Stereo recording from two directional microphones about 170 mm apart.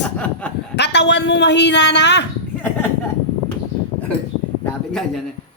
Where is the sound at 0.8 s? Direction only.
90° left.